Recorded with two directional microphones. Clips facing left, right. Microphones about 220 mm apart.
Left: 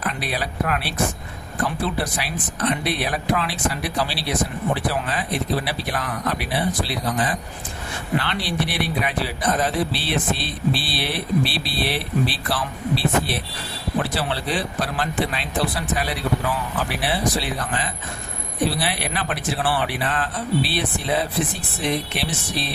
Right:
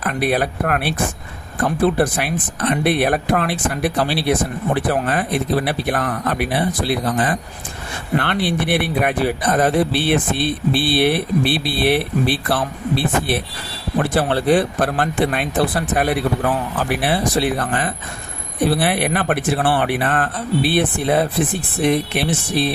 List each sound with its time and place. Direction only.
0.1 s speech: 55° right (ahead or behind)